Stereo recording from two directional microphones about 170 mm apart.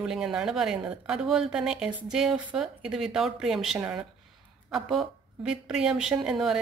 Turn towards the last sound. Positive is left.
turn(degrees=-5)  # may be behind; listen again after turning